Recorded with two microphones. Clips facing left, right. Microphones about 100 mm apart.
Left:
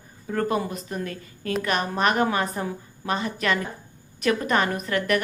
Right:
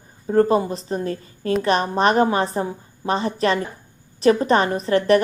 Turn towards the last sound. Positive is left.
turn(degrees=-30)  # may be behind; listen again after turning